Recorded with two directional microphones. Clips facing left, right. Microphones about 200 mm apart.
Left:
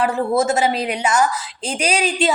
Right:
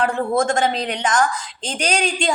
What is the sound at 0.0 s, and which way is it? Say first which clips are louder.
A woman's voice: left 1 dB; 5° left (ahead or behind).